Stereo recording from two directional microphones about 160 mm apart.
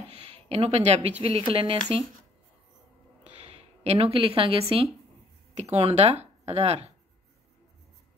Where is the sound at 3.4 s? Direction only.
40° right (ahead or behind).